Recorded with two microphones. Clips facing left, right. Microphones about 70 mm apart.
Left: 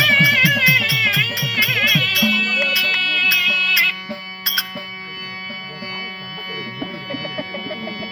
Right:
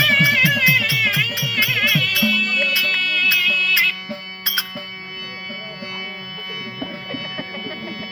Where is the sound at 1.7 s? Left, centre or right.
Centre.